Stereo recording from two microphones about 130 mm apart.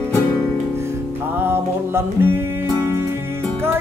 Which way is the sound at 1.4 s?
20° right (ahead or behind).